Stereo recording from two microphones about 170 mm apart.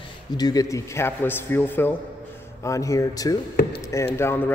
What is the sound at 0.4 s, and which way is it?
A man's voice, 20° left (ahead or behind).